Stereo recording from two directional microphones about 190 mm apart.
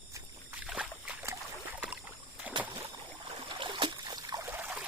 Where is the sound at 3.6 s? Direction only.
25° right (ahead or behind); by 4.8 s 10° right (ahead or behind).